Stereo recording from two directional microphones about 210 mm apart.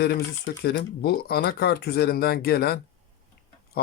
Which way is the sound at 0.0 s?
50° left (ahead or behind).